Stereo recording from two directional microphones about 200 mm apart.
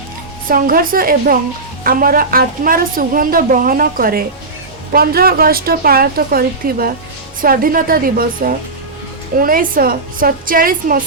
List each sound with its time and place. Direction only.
0.4 s a woman's voice: 45° right (ahead or behind)